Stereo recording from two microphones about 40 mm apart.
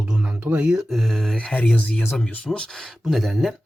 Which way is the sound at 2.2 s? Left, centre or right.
Left.